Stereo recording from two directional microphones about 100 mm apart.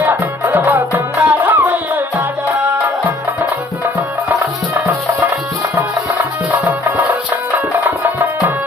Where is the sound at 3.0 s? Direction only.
20° right (ahead or behind).